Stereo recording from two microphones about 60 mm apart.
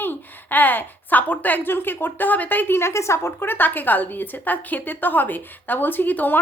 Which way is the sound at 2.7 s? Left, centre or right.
Left.